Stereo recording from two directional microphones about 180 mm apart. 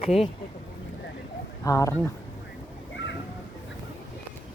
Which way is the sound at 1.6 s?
15° left (ahead or behind).